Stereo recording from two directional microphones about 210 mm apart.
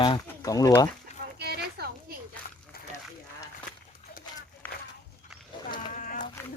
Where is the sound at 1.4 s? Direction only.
50° right (ahead or behind).